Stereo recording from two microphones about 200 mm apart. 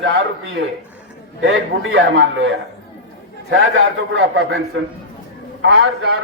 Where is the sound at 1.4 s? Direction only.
70° right (ahead or behind).